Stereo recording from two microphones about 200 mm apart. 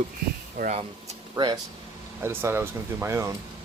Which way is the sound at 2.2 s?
10° right (ahead or behind).